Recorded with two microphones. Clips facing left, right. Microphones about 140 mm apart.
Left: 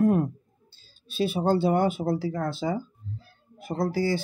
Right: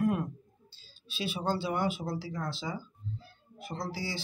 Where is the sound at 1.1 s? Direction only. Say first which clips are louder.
Left 9 dB; 50° left (ahead or behind).